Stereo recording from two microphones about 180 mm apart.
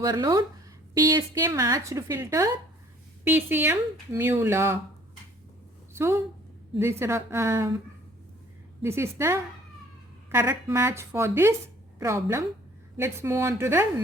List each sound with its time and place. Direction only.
0.0 s a woman's voice: 20° right (ahead or behind)
5.9 s a woman's voice: 15° right (ahead or behind)
8.8 s speech: 15° right (ahead or behind)